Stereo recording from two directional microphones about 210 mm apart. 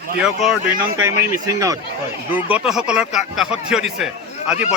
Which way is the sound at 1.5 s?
15° right (ahead or behind).